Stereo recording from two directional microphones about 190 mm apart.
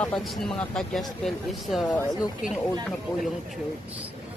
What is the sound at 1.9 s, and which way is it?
Speech, 20° left (ahead or behind).